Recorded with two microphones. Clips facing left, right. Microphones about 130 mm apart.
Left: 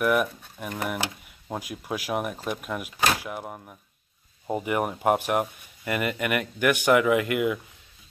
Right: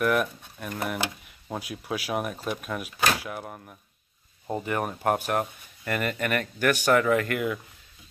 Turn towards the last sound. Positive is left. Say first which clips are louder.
# left 2 dB
turn(degrees=10)  # may be behind; listen again after turning